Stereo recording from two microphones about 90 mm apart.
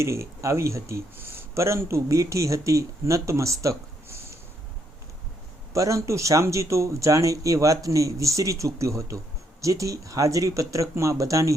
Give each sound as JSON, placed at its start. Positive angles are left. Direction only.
{"t": 0.0, "sound": "speech", "side_deg": -30}
{"t": 5.7, "sound": "speech", "side_deg": -35}